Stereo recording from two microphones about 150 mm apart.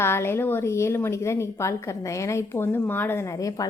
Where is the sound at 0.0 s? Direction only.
15° left (ahead or behind).